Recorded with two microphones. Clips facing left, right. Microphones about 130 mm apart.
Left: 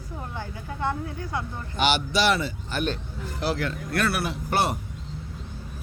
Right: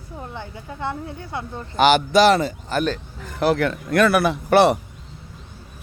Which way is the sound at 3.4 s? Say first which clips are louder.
Right 8 dB; 60° right (ahead or behind).